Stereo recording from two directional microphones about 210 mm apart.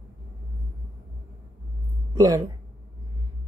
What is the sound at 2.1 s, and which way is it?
Speech, 15° right (ahead or behind).